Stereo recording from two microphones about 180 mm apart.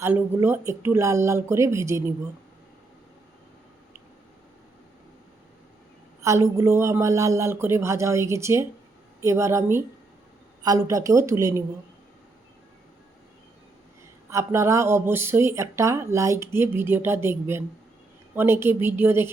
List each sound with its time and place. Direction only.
0.0 s speech: 15° right (ahead or behind)
6.2 s speech: 15° right (ahead or behind)
14.3 s speech: 15° right (ahead or behind)